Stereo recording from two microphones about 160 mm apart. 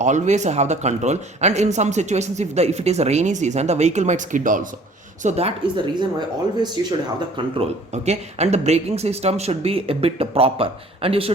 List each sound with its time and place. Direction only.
0.0 s speech: 50° right (ahead or behind)
5.2 s speech: 40° right (ahead or behind)
7.3 s speech: 40° right (ahead or behind)